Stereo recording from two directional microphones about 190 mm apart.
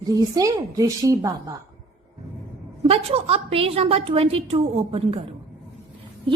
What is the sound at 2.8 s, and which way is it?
A woman's voice, 30° right (ahead or behind).